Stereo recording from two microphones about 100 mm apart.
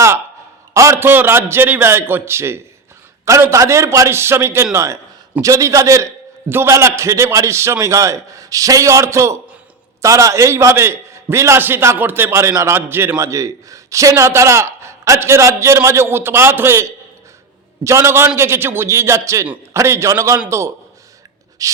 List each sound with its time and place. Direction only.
0.7 s a man's voice: 30° right (ahead or behind)
21.6 s a man's voice: 35° right (ahead or behind)